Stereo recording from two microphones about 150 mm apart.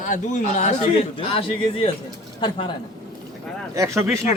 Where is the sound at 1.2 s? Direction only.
40° left (ahead or behind).